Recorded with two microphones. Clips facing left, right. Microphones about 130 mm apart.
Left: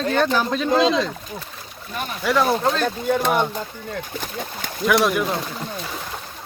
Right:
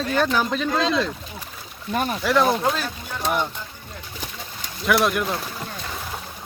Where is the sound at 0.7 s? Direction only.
20° left (ahead or behind).